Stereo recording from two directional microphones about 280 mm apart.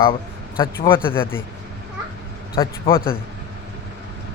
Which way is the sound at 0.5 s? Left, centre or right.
Left.